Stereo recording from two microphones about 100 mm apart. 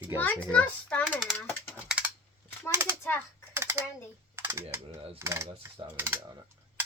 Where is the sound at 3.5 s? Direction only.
25° right (ahead or behind).